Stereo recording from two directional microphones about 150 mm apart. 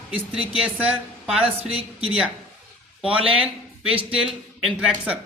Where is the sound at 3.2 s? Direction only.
40° right (ahead or behind).